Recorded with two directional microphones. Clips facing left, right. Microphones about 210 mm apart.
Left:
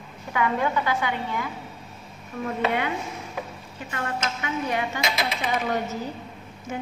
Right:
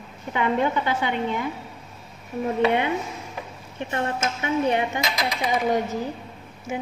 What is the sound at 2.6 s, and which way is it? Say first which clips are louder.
A woman's voice: right 3 dB; 20° right (ahead or behind).